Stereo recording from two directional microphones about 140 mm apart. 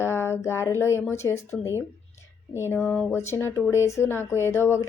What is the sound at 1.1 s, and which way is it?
Speech, 20° left (ahead or behind).